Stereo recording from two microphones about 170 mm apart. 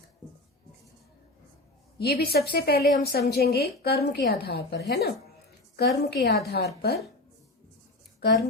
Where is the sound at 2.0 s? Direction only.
65° left (ahead or behind).